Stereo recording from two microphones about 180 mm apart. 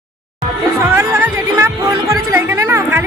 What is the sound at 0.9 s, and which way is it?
Music, 10° right (ahead or behind).